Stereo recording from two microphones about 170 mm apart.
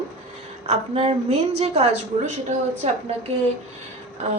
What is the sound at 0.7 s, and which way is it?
A woman's voice, 35° right (ahead or behind).